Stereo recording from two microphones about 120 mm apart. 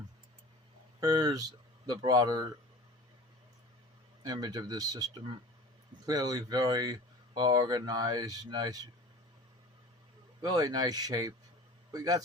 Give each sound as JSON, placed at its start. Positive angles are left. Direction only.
{"t": 0.9, "sound": "speech", "side_deg": -30}
{"t": 4.2, "sound": "speech", "side_deg": -35}
{"t": 10.4, "sound": "a man's voice", "side_deg": -35}